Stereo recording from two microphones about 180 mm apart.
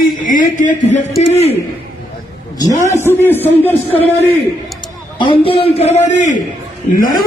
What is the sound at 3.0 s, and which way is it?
Speech, 10° left (ahead or behind).